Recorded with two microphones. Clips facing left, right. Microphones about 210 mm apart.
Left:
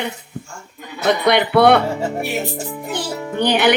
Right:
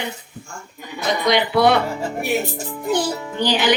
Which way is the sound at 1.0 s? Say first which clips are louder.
Left 3 dB; 60° left (ahead or behind).